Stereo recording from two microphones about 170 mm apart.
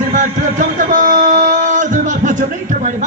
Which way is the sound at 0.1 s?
45° right (ahead or behind).